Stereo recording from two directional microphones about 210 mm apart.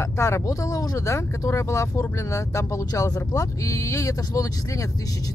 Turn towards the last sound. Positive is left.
turn(degrees=15)  # may be behind; listen again after turning